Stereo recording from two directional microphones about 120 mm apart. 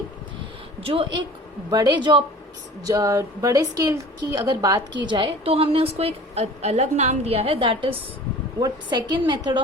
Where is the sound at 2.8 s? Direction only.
30° right (ahead or behind).